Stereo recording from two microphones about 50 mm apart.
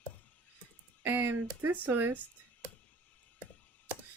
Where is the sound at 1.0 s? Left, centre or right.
Right.